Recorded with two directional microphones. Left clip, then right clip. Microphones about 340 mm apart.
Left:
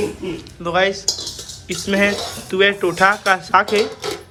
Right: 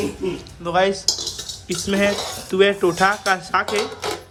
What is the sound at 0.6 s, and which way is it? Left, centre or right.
A man's voice, centre.